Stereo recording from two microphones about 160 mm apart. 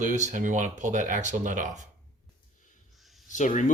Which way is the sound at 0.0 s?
50° right (ahead or behind).